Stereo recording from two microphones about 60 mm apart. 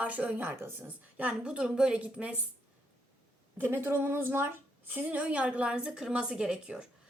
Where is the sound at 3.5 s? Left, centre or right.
Right.